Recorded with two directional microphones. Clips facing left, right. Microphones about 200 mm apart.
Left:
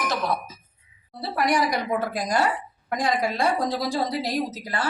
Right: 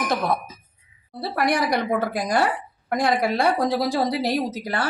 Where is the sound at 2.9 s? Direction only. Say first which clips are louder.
Right 3 dB; 65° right (ahead or behind).